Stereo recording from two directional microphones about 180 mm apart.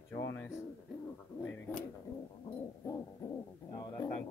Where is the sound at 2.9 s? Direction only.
20° left (ahead or behind).